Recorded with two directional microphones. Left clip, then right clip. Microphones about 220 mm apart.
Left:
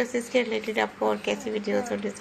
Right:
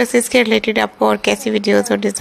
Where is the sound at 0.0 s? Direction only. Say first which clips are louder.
Right 12 dB; 45° right (ahead or behind).